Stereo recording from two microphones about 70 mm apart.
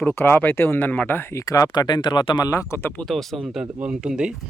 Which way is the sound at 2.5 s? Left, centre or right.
Left.